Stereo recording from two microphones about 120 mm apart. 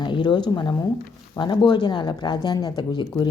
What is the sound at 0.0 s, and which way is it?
Speech, 40° left (ahead or behind).